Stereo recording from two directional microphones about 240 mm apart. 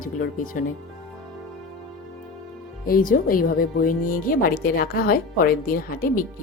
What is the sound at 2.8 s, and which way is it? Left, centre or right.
Speech, left.